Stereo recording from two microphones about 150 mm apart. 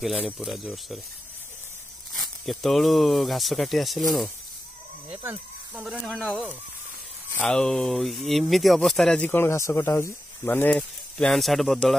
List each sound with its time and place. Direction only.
0.0 s speech: centre (ahead or behind)
2.1 s speech: centre (ahead or behind)
5.1 s speech: 10° right (ahead or behind)
5.9 s speech: centre (ahead or behind)